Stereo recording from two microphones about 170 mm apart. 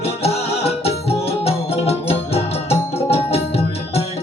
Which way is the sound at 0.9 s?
35° left (ahead or behind).